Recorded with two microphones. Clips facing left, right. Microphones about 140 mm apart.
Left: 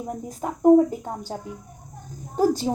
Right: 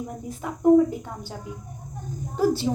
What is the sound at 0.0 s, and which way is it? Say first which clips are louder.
A woman's voice: left 3 dB; 40° left (ahead or behind).